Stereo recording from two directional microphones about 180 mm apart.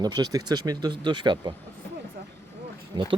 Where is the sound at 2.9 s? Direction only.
25° right (ahead or behind).